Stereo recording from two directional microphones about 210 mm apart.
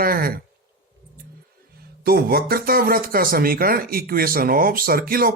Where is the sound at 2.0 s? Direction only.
45° right (ahead or behind).